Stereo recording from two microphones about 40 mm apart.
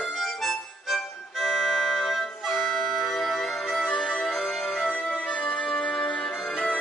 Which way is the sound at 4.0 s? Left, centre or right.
Centre.